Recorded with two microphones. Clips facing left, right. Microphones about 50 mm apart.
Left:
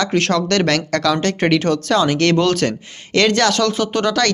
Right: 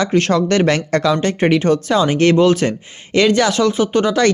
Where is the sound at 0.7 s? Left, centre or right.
Right.